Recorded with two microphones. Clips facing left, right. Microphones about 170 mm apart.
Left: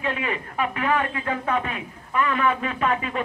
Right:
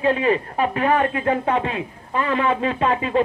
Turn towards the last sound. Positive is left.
turn(degrees=-30)  # may be behind; listen again after turning